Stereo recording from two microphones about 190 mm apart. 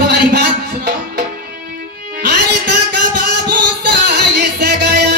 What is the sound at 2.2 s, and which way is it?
Music, 60° right (ahead or behind).